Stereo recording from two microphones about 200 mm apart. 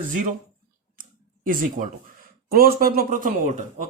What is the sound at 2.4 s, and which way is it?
Speech, 50° right (ahead or behind).